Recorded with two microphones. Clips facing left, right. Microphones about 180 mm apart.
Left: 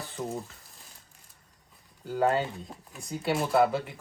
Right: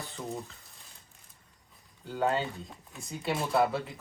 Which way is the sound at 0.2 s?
20° left (ahead or behind).